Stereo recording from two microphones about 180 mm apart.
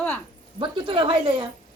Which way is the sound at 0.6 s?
30° right (ahead or behind).